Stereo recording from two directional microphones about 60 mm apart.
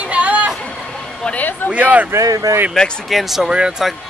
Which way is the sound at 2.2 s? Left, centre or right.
Right.